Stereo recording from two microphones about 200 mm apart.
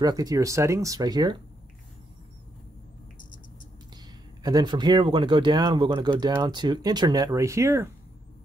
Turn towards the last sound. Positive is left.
turn(degrees=-15)  # may be behind; listen again after turning